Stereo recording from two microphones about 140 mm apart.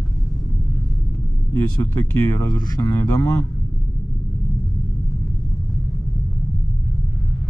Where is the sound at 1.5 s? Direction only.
20° left (ahead or behind).